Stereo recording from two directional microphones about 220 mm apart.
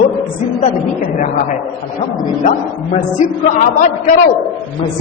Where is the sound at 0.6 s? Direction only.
35° left (ahead or behind).